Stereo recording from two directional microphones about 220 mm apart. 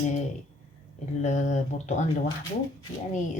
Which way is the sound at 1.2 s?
30° left (ahead or behind).